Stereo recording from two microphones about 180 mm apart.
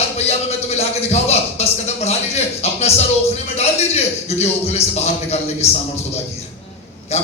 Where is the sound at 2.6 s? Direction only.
35° left (ahead or behind).